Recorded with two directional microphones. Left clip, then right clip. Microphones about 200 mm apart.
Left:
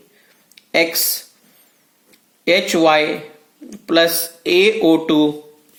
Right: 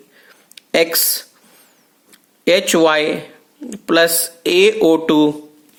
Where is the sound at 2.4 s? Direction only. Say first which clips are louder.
Right 2 dB; 40° right (ahead or behind).